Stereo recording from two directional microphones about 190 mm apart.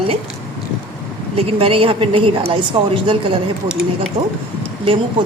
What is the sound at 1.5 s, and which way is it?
A woman's voice, 30° right (ahead or behind).